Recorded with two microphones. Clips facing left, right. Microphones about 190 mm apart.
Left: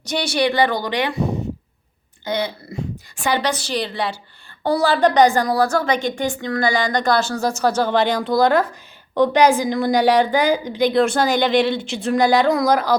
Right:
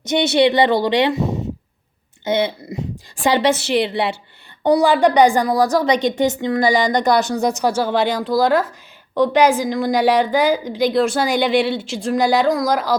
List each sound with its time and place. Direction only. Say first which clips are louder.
0.0 s speech: right 5 dB; 20° right (ahead or behind)
2.2 s a woman's voice: right 4 dB; 20° right (ahead or behind); by 13.0 s centre (ahead or behind)